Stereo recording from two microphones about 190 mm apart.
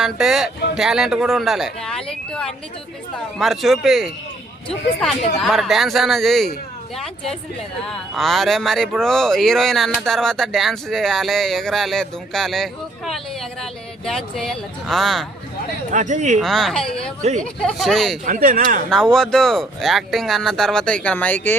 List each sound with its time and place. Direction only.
0.0 s speech: centre (ahead or behind)
5.4 s speech: centre (ahead or behind)
15.9 s speech: 40° right (ahead or behind)
16.4 s speech: centre (ahead or behind)
18.3 s speech: 45° right (ahead or behind)
18.9 s speech: 5° left (ahead or behind)